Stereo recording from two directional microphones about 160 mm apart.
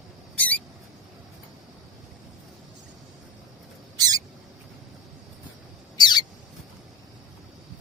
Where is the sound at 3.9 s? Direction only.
25° right (ahead or behind).